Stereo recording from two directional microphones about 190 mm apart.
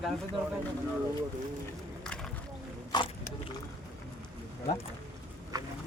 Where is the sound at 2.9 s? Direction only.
20° left (ahead or behind).